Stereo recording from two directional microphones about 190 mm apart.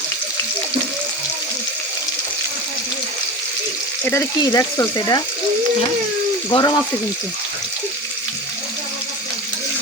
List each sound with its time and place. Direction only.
4.0 s speech: 15° left (ahead or behind)
6.5 s speech: 20° left (ahead or behind)